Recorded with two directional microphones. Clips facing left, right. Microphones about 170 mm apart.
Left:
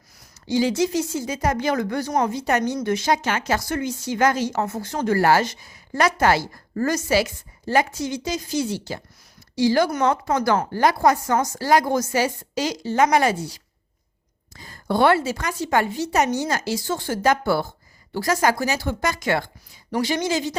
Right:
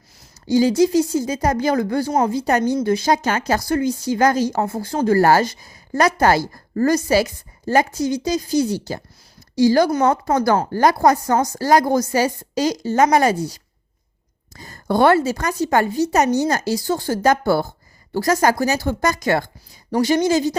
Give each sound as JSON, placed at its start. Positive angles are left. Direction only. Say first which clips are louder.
{"t": 0.4, "sound": "speech", "louder": "right 5 dB", "side_deg": -40}
{"t": 10.7, "sound": "speech", "louder": "right 3 dB", "side_deg": -40}